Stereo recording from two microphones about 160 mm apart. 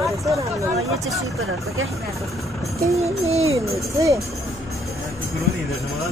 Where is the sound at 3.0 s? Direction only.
40° right (ahead or behind).